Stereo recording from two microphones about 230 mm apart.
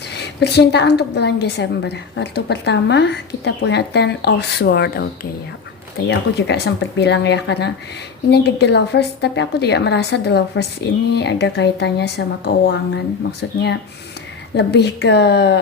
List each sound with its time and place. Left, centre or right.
0.1 s a woman's voice: left
6.1 s a woman's voice: left
14.5 s a woman's voice: left